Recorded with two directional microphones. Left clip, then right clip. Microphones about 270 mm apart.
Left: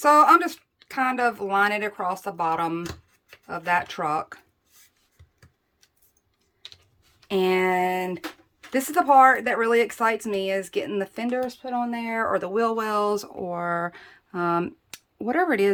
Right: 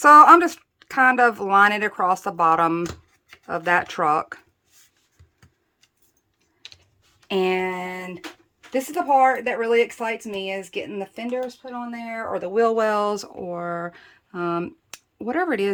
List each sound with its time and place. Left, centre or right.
0.0 s speech: centre
7.3 s a sound: centre
7.7 s speech: left
8.7 s speech: centre